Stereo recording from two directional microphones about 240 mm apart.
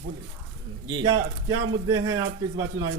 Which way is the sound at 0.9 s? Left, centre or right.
Centre.